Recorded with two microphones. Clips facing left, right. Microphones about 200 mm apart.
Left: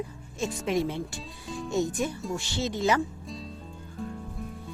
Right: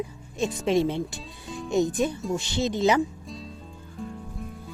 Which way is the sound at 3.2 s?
Centre (ahead or behind).